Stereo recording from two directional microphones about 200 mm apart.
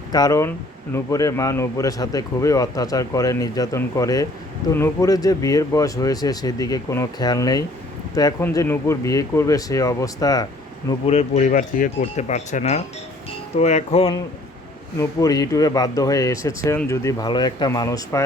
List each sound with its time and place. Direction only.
0.1 s speech: 15° left (ahead or behind)
11.0 s speech: 30° left (ahead or behind)
14.9 s speech: 15° left (ahead or behind)